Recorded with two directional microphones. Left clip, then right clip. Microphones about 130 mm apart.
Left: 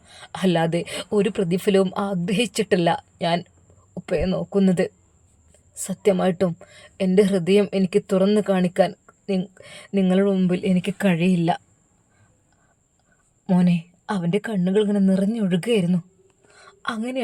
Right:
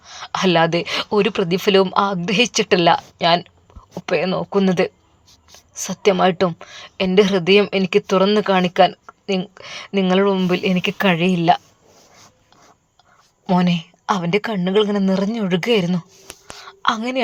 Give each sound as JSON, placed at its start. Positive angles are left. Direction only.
{"t": 0.0, "sound": "a woman's voice", "side_deg": 20}
{"t": 13.5, "sound": "a woman's voice", "side_deg": 15}
{"t": 16.6, "sound": "whispering", "side_deg": 15}